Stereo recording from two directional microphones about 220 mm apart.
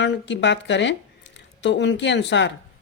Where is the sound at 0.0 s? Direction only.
55° left (ahead or behind).